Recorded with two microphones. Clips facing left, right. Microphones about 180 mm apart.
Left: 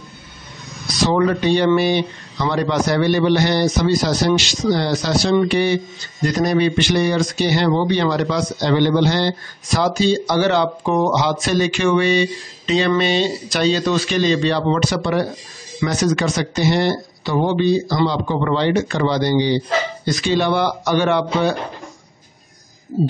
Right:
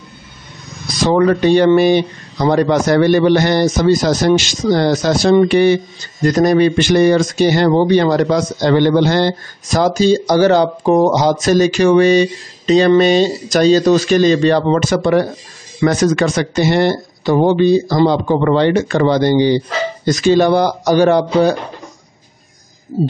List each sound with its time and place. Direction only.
1.0 s speech: 50° right (ahead or behind)